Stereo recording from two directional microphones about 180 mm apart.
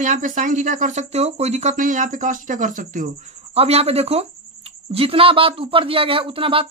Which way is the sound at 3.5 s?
35° right (ahead or behind).